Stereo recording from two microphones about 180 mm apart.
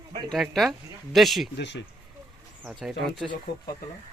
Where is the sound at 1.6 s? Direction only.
75° left (ahead or behind).